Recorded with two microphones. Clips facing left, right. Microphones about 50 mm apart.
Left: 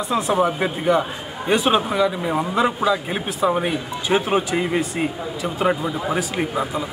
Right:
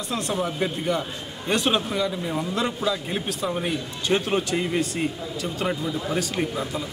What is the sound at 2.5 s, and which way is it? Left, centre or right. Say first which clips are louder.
A man's voice: left 7 dB; centre.